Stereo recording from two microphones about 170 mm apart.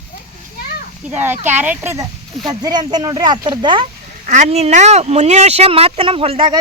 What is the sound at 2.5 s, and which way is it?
Speech, 25° right (ahead or behind).